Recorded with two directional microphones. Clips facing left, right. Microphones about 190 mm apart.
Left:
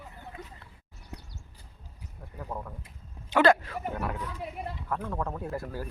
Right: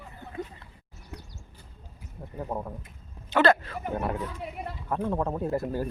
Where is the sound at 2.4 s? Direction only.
25° right (ahead or behind).